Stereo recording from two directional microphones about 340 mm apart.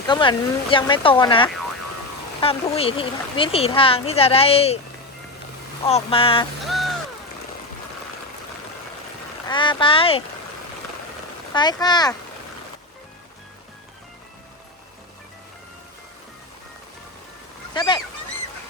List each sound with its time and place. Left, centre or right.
0.1 s speech: centre
5.9 s speech: centre
6.7 s a sound: centre
9.5 s speech: centre
11.5 s speech: centre
17.7 s speech: centre